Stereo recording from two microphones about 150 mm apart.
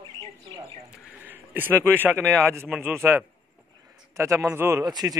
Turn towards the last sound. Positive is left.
turn(degrees=-25)  # may be behind; listen again after turning